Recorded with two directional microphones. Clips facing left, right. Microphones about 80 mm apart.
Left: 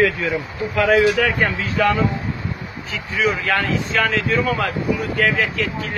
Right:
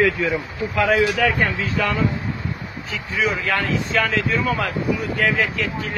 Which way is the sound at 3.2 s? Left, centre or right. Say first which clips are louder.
Left 2 dB; centre.